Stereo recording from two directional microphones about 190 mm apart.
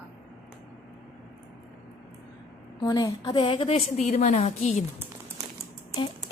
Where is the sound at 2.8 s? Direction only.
20° left (ahead or behind).